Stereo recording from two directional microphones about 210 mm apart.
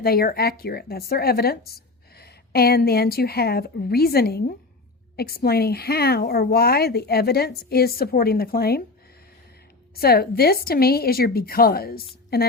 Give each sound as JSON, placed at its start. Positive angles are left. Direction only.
{"t": 0.0, "sound": "speech", "side_deg": 45}
{"t": 9.9, "sound": "speech", "side_deg": 45}